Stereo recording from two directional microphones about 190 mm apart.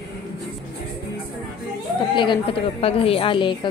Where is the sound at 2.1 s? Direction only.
25° left (ahead or behind).